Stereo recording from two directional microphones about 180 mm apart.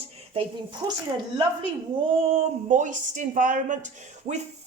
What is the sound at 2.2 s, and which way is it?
A woman's voice, 35° right (ahead or behind).